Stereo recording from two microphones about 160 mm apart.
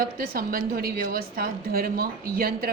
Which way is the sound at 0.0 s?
65° right (ahead or behind).